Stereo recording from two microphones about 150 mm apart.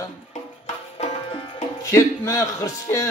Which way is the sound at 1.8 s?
20° left (ahead or behind).